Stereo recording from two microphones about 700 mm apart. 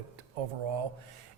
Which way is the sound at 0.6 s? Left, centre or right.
Right.